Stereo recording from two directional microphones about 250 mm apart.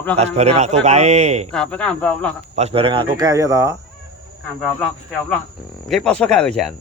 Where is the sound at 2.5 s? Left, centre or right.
Right.